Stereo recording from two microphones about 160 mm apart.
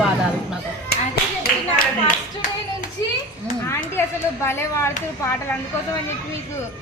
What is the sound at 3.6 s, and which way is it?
Speech, 15° left (ahead or behind).